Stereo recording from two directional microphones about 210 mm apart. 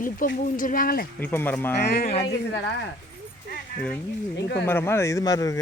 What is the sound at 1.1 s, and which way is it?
Speech, 10° left (ahead or behind).